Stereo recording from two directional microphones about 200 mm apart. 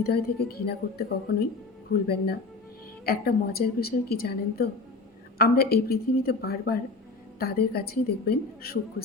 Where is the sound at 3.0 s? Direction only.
50° left (ahead or behind).